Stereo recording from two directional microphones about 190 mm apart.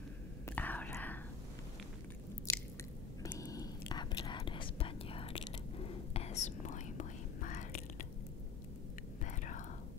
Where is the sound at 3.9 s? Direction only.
20° left (ahead or behind); by 8.0 s 40° left (ahead or behind).